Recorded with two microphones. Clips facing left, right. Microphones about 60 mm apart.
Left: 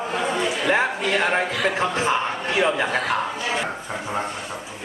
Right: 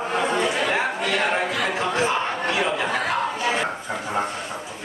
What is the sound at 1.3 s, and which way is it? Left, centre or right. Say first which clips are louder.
Speech: left 1 dB; left.